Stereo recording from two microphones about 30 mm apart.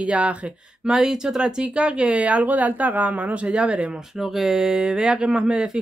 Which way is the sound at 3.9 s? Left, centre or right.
Centre.